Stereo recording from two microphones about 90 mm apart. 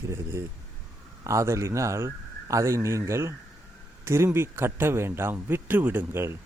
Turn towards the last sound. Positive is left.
turn(degrees=-30)  # may be behind; listen again after turning